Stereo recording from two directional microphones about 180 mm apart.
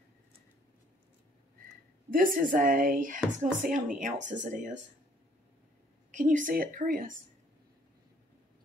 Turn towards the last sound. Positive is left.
turn(degrees=-50)  # may be behind; listen again after turning